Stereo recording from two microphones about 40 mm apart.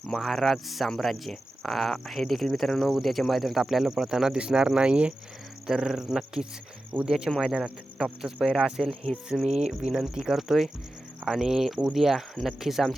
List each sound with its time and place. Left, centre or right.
0.2 s speech: centre; by 5.1 s right
5.6 s speech: centre